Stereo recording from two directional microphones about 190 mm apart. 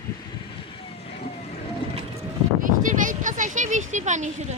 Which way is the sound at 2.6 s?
45° right (ahead or behind).